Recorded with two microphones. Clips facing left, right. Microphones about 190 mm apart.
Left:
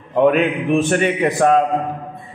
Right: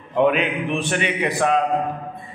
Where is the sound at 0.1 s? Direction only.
45° left (ahead or behind).